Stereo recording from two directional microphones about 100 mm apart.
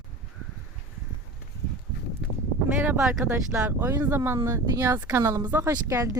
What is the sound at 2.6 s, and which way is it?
Speech, 20° right (ahead or behind).